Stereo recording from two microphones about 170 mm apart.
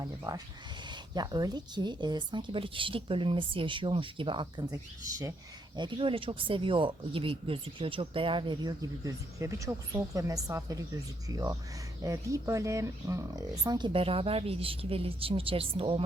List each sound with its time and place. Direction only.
0.0 s speech: 20° right (ahead or behind)
5.7 s speech: 30° right (ahead or behind)